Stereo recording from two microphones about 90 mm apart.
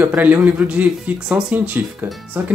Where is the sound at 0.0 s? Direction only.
15° right (ahead or behind).